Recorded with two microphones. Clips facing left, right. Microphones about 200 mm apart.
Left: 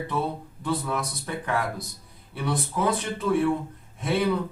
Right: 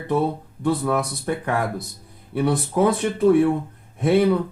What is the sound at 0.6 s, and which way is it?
Speech, 55° right (ahead or behind).